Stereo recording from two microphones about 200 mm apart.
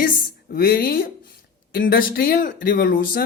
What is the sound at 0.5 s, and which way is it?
Speech, 50° left (ahead or behind).